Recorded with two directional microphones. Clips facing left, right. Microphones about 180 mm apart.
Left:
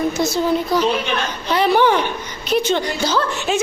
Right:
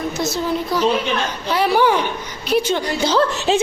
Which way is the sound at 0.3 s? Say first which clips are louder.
Left 2 dB; 5° right (ahead or behind).